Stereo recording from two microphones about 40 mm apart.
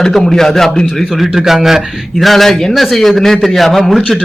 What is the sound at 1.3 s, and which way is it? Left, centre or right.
Speech, centre.